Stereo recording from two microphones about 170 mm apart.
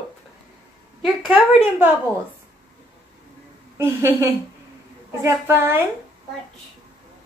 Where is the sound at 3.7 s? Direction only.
15° right (ahead or behind).